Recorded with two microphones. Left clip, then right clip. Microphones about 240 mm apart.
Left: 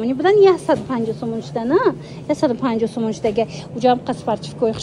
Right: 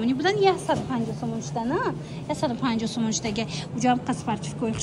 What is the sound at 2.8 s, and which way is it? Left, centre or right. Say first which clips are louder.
Speech: left 8 dB; centre.